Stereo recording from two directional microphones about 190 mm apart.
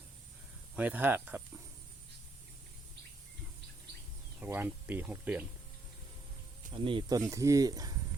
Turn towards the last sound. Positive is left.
turn(degrees=-20)  # may be behind; listen again after turning